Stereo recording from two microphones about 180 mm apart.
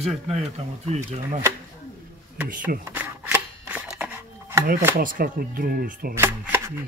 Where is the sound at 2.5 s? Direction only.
50° right (ahead or behind).